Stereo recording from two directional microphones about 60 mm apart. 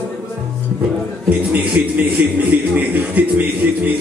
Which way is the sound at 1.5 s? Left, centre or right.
Right.